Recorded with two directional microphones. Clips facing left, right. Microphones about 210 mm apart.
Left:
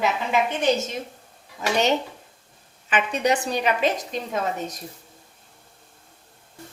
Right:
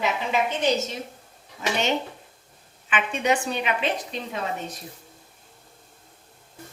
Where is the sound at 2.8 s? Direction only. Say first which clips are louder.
Left 2 dB; 40° left (ahead or behind).